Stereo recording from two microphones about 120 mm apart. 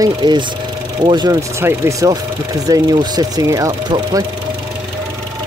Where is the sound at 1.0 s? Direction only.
40° right (ahead or behind).